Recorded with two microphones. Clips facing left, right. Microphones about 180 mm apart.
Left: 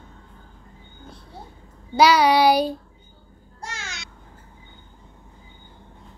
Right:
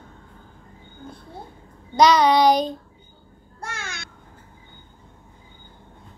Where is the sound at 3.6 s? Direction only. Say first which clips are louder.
Right 2 dB; 55° right (ahead or behind).